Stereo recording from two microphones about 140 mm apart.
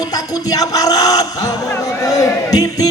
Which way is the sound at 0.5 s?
25° left (ahead or behind).